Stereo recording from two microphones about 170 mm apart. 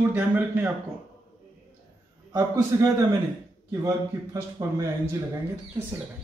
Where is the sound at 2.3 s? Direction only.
20° right (ahead or behind).